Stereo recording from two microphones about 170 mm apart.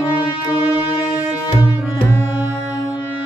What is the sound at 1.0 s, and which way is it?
Music, 5° right (ahead or behind).